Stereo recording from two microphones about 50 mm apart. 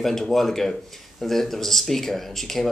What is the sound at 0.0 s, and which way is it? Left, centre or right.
Speech, centre.